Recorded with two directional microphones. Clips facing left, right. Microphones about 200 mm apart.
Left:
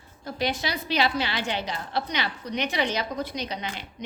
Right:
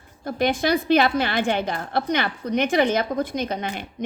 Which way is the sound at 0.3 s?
50° right (ahead or behind).